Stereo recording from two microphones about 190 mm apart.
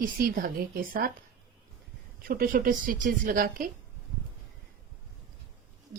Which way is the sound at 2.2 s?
50° right (ahead or behind).